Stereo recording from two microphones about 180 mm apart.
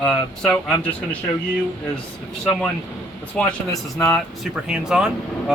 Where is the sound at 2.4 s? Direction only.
5° left (ahead or behind).